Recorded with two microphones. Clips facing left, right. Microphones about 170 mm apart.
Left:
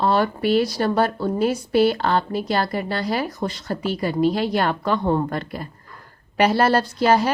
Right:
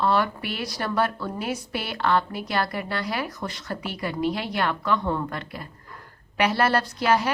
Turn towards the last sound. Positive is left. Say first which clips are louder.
# left 5 dB
turn(degrees=35)  # may be behind; listen again after turning